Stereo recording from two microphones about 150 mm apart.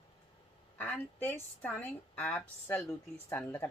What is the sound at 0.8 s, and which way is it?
A woman's voice, 10° left (ahead or behind).